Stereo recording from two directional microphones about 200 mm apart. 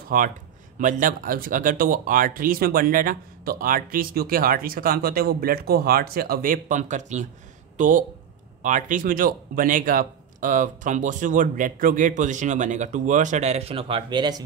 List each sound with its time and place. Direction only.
0.1 s speech: 45° right (ahead or behind); by 14.4 s 20° right (ahead or behind)